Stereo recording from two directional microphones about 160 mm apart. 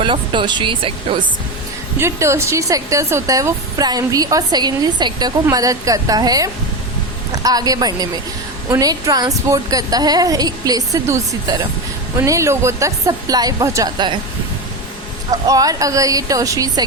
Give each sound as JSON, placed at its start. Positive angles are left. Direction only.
{"t": 0.0, "sound": "speech", "side_deg": -30}
{"t": 2.0, "sound": "a woman's voice", "side_deg": -15}
{"t": 15.3, "sound": "a woman's voice", "side_deg": -20}